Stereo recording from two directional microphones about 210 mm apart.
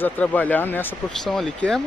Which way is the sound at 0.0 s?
5° left (ahead or behind).